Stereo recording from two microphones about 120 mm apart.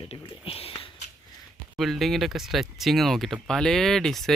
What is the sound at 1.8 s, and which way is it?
Speech, centre (ahead or behind).